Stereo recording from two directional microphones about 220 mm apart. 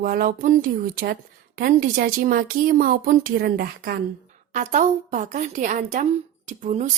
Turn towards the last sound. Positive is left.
turn(degrees=-35)  # may be behind; listen again after turning